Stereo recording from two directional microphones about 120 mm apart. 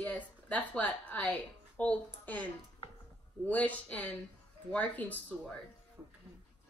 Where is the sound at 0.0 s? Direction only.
10° left (ahead or behind).